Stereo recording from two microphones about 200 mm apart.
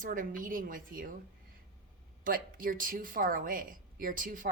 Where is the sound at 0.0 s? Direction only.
40° right (ahead or behind).